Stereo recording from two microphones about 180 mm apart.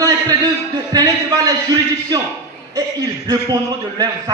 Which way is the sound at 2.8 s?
20° right (ahead or behind).